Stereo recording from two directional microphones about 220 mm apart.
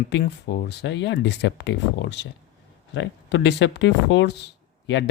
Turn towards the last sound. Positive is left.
turn(degrees=55)  # may be behind; listen again after turning